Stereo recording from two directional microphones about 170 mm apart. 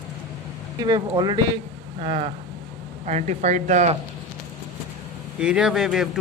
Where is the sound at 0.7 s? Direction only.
25° right (ahead or behind); by 4.0 s 40° right (ahead or behind).